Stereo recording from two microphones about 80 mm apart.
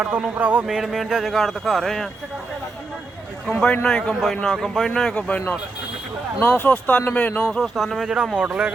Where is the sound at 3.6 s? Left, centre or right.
Centre.